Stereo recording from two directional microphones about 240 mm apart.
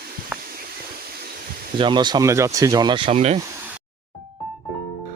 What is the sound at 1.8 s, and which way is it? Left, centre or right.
Speech, centre.